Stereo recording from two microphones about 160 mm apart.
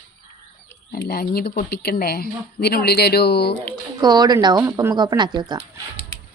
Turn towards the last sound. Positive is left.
turn(degrees=-25)  # may be behind; listen again after turning